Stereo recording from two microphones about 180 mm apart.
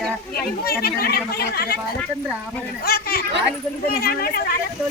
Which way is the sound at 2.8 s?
60° left (ahead or behind).